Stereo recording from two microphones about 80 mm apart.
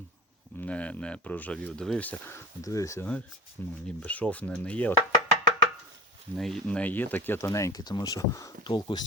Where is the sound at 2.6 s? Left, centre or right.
Left.